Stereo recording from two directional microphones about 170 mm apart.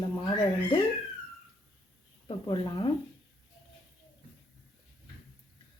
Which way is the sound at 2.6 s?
20° left (ahead or behind).